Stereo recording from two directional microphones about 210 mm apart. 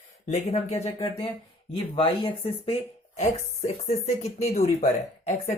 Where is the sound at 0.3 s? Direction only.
30° left (ahead or behind).